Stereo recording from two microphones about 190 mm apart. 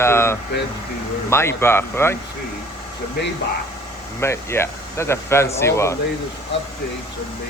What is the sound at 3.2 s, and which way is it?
Speech, 60° left (ahead or behind).